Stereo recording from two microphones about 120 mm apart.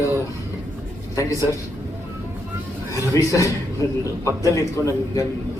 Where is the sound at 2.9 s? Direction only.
25° left (ahead or behind).